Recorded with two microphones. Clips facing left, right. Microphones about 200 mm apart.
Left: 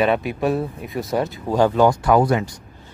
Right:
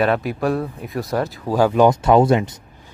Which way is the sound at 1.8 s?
25° right (ahead or behind).